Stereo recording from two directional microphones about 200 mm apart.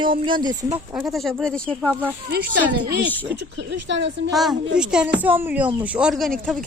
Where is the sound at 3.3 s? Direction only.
60° right (ahead or behind).